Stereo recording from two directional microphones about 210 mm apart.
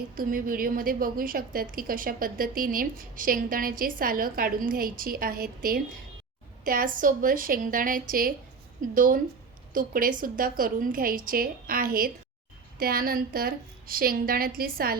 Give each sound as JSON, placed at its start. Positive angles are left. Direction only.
{"t": 0.1, "sound": "a woman's voice", "side_deg": -40}